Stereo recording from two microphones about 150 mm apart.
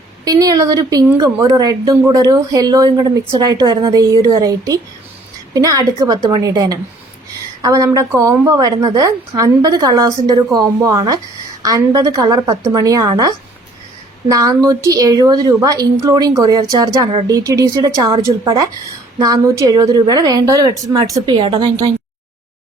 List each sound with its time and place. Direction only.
0.3 s a woman's voice: 25° right (ahead or behind)